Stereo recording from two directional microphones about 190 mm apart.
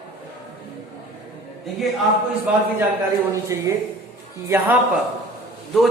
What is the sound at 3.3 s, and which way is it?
Speech, 15° right (ahead or behind).